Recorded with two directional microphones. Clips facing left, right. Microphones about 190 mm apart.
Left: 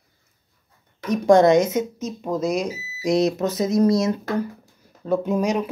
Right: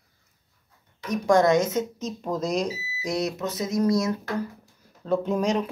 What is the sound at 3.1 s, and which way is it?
Speech, 25° left (ahead or behind).